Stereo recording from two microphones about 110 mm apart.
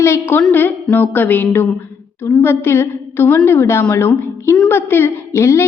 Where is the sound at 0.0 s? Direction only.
20° left (ahead or behind).